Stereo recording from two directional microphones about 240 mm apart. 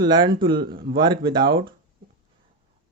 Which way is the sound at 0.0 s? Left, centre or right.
Centre.